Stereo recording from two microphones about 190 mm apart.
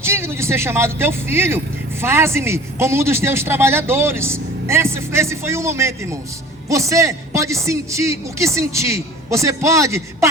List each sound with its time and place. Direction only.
0.0 s speech: 15° right (ahead or behind)